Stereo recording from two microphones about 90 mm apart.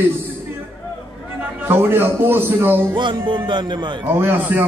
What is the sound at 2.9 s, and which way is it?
Music, 60° right (ahead or behind).